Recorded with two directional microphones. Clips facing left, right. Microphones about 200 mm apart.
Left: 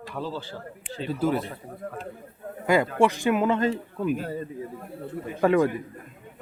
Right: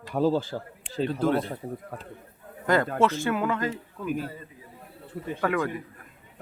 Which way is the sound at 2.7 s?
10° left (ahead or behind).